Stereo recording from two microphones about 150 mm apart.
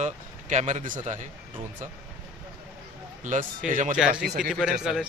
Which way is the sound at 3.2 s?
60° right (ahead or behind).